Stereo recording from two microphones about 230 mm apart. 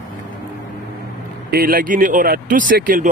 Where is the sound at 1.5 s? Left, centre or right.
Right.